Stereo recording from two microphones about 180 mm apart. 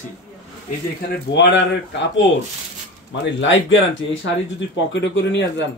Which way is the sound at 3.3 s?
90° left.